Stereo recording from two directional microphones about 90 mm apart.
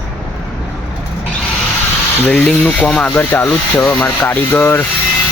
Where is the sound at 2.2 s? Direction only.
15° left (ahead or behind).